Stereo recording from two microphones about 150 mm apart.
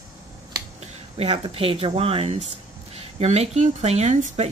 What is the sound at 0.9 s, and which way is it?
Speech, 40° right (ahead or behind).